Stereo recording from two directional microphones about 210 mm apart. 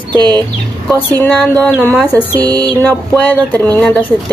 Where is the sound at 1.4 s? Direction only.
5° left (ahead or behind).